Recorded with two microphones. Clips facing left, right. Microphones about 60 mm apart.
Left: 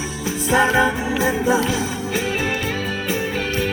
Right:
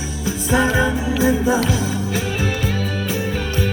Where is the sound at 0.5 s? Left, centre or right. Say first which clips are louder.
Left 1 dB; left.